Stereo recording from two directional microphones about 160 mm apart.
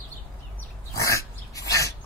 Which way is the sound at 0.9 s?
20° left (ahead or behind).